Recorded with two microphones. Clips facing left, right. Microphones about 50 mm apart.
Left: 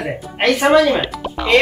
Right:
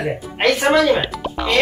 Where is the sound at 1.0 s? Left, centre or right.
Centre.